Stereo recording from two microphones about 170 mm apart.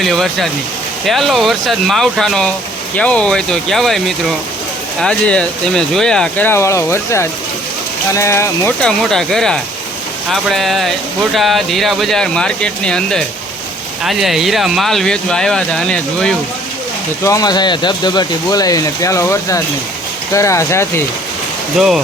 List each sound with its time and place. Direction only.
0.0 s speech: centre (ahead or behind)
8.8 s speech: 5° left (ahead or behind)
17.2 s speech: 20° left (ahead or behind)
21.8 s speech: centre (ahead or behind)